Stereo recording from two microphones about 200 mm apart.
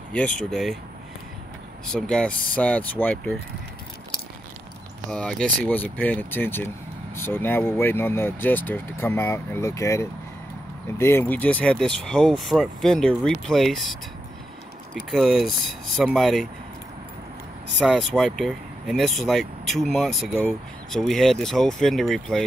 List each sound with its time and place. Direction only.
0.5 s speech: centre (ahead or behind)
1.9 s speech: 5° left (ahead or behind)
5.1 s speech: 5° left (ahead or behind)
15.0 s speech: centre (ahead or behind)
17.7 s speech: centre (ahead or behind)